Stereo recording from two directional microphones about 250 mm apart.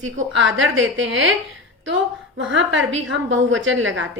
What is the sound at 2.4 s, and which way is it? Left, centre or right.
A woman's voice, right.